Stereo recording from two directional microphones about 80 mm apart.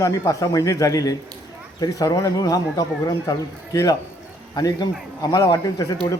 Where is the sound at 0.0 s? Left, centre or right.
Left.